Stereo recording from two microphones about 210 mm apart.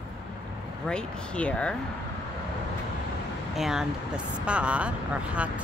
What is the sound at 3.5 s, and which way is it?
Speech, centre (ahead or behind).